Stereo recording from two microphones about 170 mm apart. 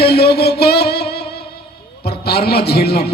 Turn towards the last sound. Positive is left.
turn(degrees=70)  # may be behind; listen again after turning